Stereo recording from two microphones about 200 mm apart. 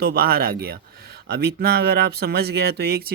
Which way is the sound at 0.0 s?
50° right (ahead or behind).